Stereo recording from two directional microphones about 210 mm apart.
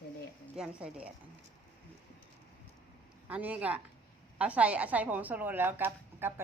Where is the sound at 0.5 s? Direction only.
5° right (ahead or behind).